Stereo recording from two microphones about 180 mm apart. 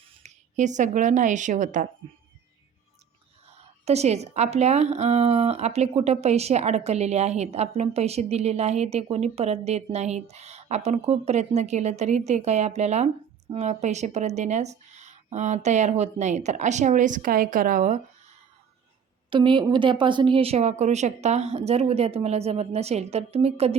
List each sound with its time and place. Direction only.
0.2 s speech: 40° right (ahead or behind)
3.5 s speech: 35° right (ahead or behind)
19.3 s speech: 25° right (ahead or behind)